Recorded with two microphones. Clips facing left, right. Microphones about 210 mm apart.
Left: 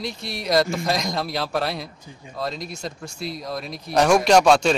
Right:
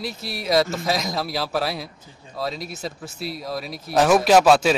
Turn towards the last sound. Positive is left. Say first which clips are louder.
# right 1 dB
turn(degrees=-5)  # may be behind; listen again after turning